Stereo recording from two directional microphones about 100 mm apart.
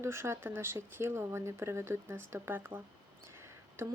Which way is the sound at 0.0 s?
25° right (ahead or behind).